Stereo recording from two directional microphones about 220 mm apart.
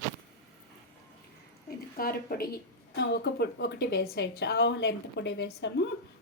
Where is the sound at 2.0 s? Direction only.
45° left (ahead or behind).